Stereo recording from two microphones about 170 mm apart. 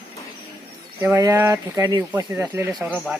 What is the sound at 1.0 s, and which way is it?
Speech, 15° right (ahead or behind).